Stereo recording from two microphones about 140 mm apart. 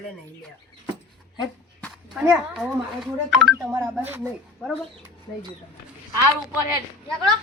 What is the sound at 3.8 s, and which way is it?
Speech, 15° right (ahead or behind).